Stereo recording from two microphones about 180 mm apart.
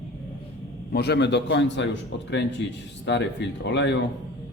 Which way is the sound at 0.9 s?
65° left (ahead or behind).